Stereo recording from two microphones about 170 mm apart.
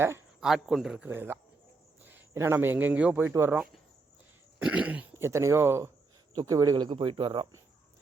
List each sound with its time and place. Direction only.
0.3 s a man's voice: centre (ahead or behind); by 7.4 s 30° right (ahead or behind)